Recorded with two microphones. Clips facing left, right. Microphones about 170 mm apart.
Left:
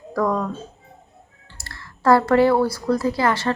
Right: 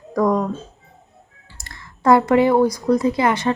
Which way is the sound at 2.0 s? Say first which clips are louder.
Right 1 dB; 20° right (ahead or behind).